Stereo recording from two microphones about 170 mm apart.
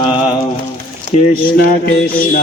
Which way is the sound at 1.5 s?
60° left (ahead or behind).